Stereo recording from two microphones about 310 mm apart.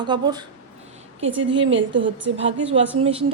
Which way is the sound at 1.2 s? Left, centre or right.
Right.